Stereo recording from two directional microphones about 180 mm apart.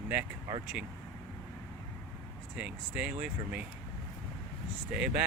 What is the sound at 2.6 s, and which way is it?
Speech, 5° right (ahead or behind).